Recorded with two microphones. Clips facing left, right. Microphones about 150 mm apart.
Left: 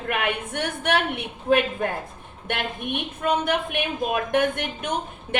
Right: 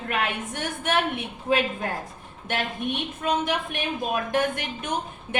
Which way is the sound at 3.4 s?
55° left (ahead or behind).